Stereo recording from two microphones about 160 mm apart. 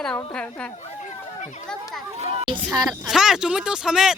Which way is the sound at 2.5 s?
30° right (ahead or behind).